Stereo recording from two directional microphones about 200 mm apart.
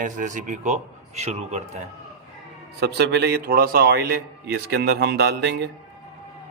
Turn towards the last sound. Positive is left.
turn(degrees=-60)  # may be behind; listen again after turning